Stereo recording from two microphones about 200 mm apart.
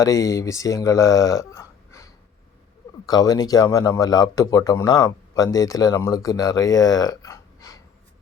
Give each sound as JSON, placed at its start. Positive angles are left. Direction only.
{"t": 0.0, "sound": "speech", "side_deg": 15}